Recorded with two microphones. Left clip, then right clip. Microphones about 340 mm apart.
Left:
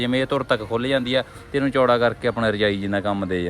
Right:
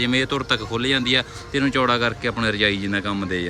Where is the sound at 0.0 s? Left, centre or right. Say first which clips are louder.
Even; centre.